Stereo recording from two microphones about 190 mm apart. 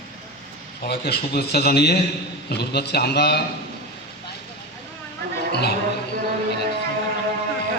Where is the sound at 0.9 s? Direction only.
55° left (ahead or behind).